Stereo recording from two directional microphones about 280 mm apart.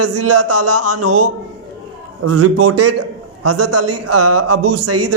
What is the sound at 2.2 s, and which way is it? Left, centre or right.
A woman's voice, right.